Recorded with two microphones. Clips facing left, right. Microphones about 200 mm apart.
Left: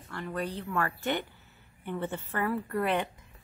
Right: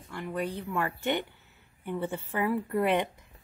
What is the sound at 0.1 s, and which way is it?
A woman's voice, 10° right (ahead or behind).